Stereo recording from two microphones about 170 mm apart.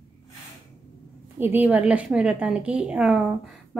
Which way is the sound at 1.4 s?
10° right (ahead or behind).